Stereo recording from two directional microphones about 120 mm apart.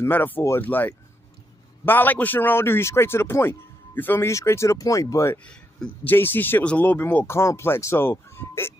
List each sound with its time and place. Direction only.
0.0 s speech: 15° left (ahead or behind)
5.4 s speech: 10° left (ahead or behind)